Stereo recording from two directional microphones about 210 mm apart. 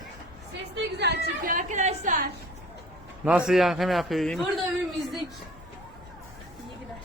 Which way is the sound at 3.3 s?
5° right (ahead or behind).